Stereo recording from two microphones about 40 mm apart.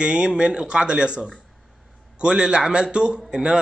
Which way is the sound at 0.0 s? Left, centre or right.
Right.